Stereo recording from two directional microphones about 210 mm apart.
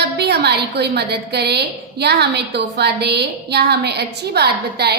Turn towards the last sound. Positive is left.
turn(degrees=-50)  # may be behind; listen again after turning